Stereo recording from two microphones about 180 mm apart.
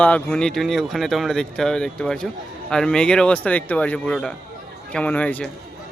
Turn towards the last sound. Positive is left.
turn(degrees=10)  # may be behind; listen again after turning